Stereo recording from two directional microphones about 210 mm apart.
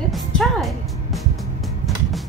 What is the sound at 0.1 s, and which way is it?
Music, centre (ahead or behind).